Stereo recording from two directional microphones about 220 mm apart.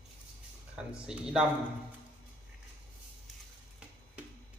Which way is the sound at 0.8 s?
5° right (ahead or behind).